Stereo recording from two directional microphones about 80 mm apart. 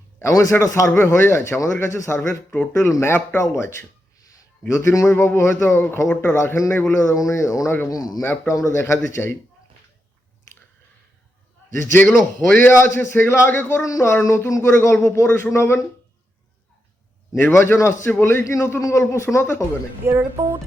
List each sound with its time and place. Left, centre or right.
0.2 s a man's voice: left
8.2 s a man's voice: left
12.0 s a man's voice: centre
12.6 s a man's voice: left
17.5 s a man's voice: left
20.1 s speech: right